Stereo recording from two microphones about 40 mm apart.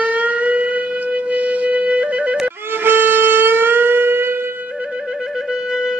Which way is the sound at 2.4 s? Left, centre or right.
Right.